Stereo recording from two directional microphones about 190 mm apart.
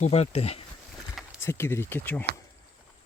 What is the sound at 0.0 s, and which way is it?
Speech, 35° left (ahead or behind).